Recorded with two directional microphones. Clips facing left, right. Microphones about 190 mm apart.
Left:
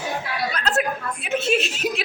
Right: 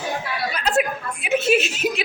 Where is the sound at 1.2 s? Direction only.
5° right (ahead or behind).